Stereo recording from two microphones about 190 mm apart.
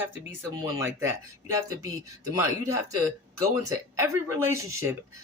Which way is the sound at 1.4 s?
15° right (ahead or behind).